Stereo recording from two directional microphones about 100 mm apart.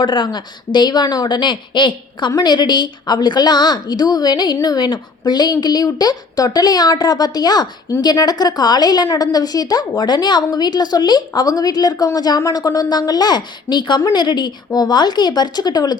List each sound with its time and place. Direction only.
0.0 s a woman's voice: 50° left (ahead or behind)